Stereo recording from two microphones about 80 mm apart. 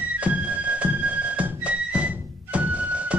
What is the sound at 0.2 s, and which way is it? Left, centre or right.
Music, centre.